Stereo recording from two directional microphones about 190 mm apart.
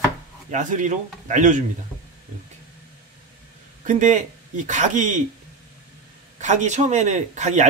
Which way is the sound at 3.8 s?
40° right (ahead or behind).